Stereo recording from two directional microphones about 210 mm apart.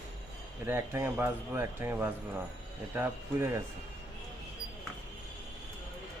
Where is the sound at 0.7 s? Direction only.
10° right (ahead or behind).